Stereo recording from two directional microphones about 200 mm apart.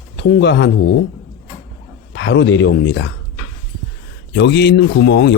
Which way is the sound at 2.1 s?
65° left (ahead or behind).